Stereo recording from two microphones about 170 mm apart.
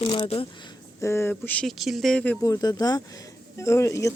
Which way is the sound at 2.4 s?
20° left (ahead or behind).